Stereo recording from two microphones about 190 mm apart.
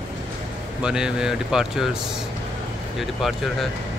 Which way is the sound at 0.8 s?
5° right (ahead or behind).